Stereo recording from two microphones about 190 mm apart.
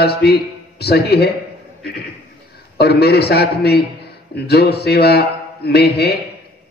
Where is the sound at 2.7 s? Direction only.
55° left (ahead or behind).